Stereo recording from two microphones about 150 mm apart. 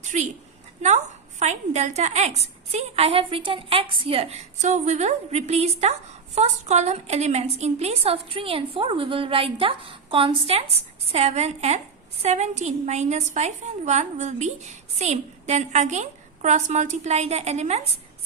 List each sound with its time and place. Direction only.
0.0 s a woman's voice: 50° right (ahead or behind)